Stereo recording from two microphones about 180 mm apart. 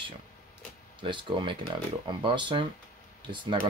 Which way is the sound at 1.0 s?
25° right (ahead or behind).